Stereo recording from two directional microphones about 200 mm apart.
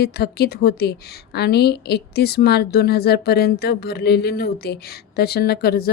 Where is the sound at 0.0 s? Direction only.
55° left (ahead or behind).